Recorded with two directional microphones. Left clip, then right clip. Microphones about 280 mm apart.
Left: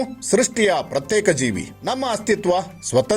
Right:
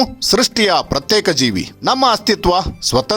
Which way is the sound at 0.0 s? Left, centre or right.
Right.